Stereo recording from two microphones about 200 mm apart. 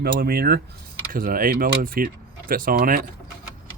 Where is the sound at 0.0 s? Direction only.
50° right (ahead or behind).